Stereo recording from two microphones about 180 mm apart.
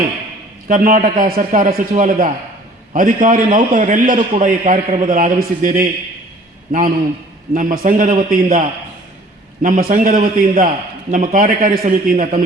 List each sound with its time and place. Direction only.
0.7 s a man's voice: 50° right (ahead or behind)